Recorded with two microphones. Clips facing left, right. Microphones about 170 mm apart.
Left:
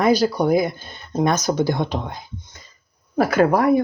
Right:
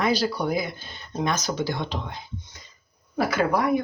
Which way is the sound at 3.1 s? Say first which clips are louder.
Left 6 dB; 45° left (ahead or behind).